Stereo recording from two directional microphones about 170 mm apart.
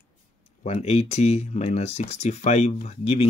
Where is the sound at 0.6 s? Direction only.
40° left (ahead or behind).